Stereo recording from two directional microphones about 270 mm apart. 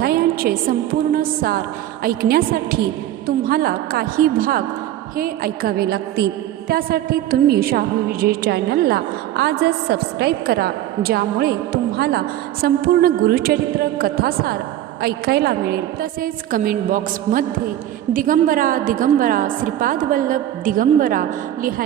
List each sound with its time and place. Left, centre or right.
0.0 s a woman's voice: right